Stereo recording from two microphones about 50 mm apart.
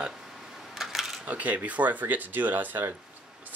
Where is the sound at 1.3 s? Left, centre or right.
Right.